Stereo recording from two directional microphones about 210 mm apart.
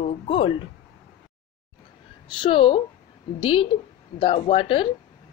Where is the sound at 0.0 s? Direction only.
30° left (ahead or behind).